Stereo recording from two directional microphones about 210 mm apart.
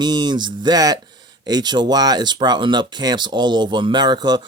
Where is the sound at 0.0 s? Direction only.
20° right (ahead or behind).